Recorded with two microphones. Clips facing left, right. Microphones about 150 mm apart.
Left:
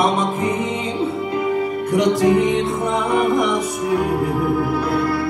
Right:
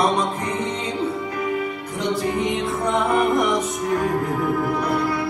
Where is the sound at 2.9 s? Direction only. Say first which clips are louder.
Left 1 dB; centre (ahead or behind).